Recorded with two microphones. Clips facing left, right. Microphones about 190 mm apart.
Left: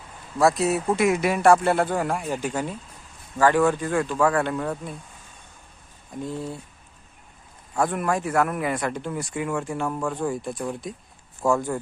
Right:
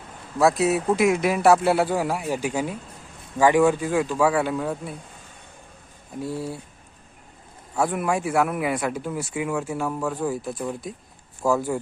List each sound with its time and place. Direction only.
0.3 s speech: centre (ahead or behind)
6.2 s speech: 5° right (ahead or behind)
7.8 s speech: 10° right (ahead or behind)